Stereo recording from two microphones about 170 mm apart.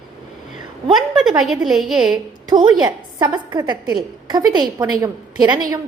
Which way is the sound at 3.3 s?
25° right (ahead or behind).